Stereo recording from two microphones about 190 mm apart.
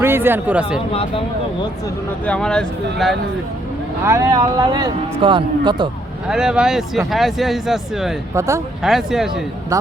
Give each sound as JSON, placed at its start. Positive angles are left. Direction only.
{"t": 0.0, "sound": "speech", "side_deg": -10}
{"t": 2.2, "sound": "speech", "side_deg": 5}
{"t": 4.0, "sound": "a man's voice", "side_deg": -15}
{"t": 6.2, "sound": "speech", "side_deg": -5}
{"t": 8.4, "sound": "speech", "side_deg": -15}
{"t": 8.8, "sound": "speech", "side_deg": 0}